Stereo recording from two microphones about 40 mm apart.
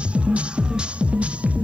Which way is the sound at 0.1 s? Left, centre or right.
Right.